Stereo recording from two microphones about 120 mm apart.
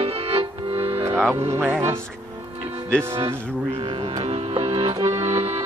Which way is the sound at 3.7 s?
45° right (ahead or behind).